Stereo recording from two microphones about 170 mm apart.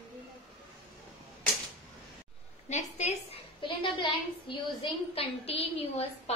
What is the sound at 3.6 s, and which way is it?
A woman's voice, 30° left (ahead or behind).